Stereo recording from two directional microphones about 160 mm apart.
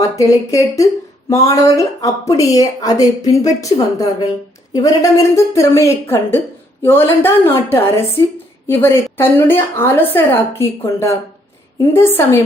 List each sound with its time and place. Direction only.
0.0 s a woman's voice: 20° left (ahead or behind)